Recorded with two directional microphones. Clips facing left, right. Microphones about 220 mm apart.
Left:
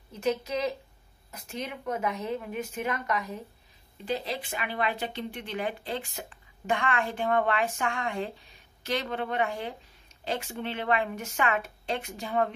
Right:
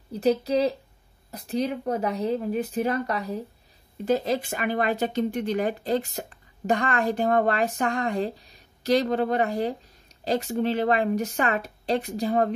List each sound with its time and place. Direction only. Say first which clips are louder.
0.1 s speech: right 7 dB; 35° right (ahead or behind)
4.0 s speech: right 8 dB; 45° right (ahead or behind)